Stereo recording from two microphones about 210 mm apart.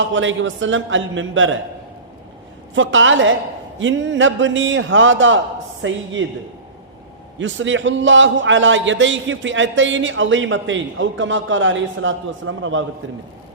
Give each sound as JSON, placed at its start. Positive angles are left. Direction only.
{"t": 0.0, "sound": "a man's voice", "side_deg": -65}
{"t": 2.7, "sound": "a man's voice", "side_deg": -65}
{"t": 7.3, "sound": "a man's voice", "side_deg": -65}